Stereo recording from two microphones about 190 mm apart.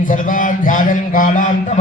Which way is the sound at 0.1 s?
45° left (ahead or behind).